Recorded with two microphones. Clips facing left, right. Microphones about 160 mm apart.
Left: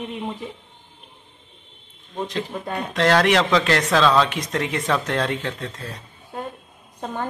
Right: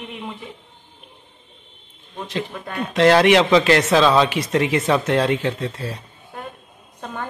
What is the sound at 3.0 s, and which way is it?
Speech, 5° right (ahead or behind).